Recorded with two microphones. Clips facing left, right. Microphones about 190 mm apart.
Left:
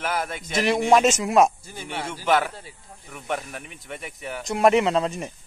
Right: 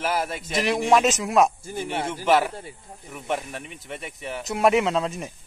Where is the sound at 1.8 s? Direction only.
30° right (ahead or behind).